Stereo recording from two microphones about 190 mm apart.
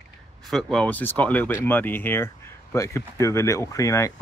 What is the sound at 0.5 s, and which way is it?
Speech, 5° left (ahead or behind).